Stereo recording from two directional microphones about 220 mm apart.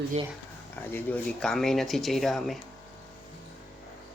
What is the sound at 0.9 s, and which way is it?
Speech, 10° left (ahead or behind).